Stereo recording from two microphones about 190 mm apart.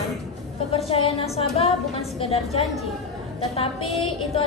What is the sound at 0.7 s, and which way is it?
A woman's voice, 30° left (ahead or behind).